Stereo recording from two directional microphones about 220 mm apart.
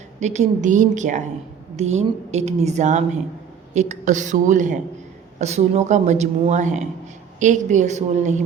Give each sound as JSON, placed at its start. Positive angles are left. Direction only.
{"t": 0.2, "sound": "a woman's voice", "side_deg": -30}